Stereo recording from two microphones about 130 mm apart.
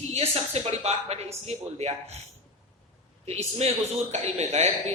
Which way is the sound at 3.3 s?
55° right (ahead or behind).